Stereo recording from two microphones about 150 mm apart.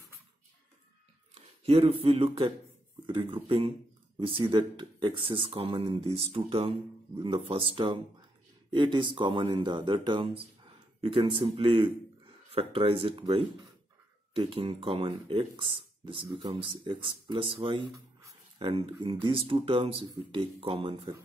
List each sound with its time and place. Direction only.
1.3 s speech: 40° right (ahead or behind)